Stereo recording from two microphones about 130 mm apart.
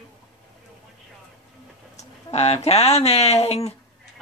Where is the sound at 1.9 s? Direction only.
55° left (ahead or behind).